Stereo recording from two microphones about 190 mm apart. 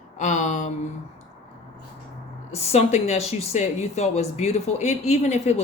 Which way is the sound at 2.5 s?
35° left (ahead or behind).